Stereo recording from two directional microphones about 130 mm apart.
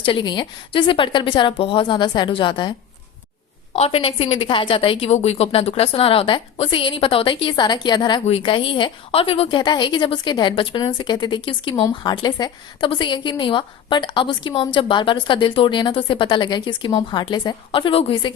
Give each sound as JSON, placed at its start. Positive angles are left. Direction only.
{"t": 0.0, "sound": "a woman's voice", "side_deg": 40}
{"t": 3.7, "sound": "a woman's voice", "side_deg": 50}